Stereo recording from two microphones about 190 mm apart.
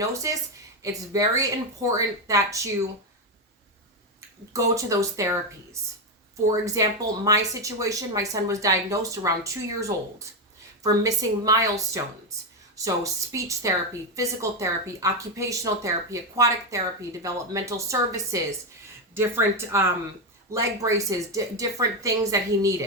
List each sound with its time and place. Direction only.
0.0 s a woman's voice: 15° right (ahead or behind)
4.5 s a woman's voice: 15° right (ahead or behind)
6.5 s a woman's voice: 15° right (ahead or behind)